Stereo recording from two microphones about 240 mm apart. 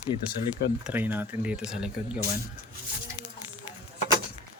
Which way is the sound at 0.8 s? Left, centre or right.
Centre.